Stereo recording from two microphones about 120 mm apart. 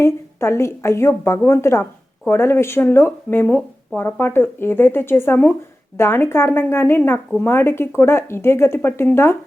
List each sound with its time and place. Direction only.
0.0 s a woman's voice: 20° left (ahead or behind)